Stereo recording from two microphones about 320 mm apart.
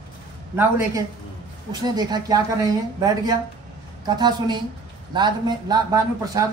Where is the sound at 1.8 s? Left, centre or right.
Centre.